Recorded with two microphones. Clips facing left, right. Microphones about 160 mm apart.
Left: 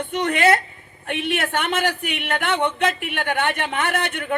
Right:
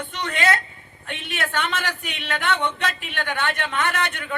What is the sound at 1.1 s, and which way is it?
A man's voice, 55° left (ahead or behind).